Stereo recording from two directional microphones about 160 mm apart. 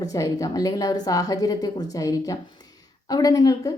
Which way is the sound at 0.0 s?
20° left (ahead or behind).